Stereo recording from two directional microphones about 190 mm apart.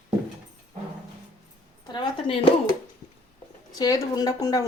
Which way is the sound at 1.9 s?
25° left (ahead or behind).